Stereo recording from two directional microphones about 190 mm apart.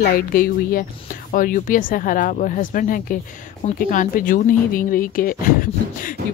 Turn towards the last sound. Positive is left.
turn(degrees=45)  # may be behind; listen again after turning